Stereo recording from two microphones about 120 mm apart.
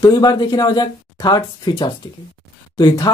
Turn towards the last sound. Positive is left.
turn(degrees=35)  # may be behind; listen again after turning